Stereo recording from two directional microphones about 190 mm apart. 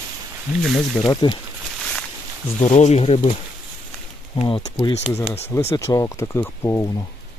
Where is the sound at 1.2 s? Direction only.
25° left (ahead or behind).